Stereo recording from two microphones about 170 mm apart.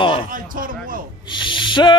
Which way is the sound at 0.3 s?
55° right (ahead or behind).